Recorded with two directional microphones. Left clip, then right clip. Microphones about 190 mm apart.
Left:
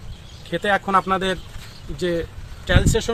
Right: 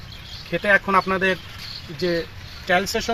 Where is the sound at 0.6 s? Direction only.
30° left (ahead or behind).